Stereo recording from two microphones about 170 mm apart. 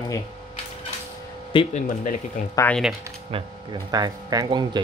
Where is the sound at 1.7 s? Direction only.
45° left (ahead or behind).